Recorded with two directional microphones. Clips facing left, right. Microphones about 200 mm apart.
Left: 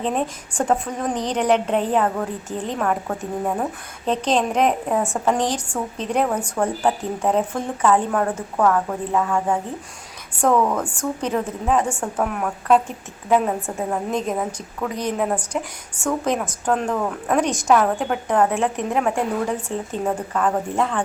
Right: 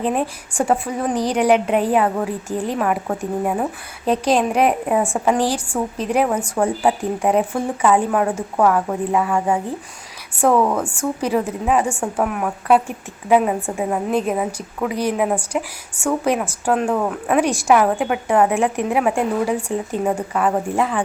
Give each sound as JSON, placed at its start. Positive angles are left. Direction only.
{"t": 0.0, "sound": "a woman's voice", "side_deg": -10}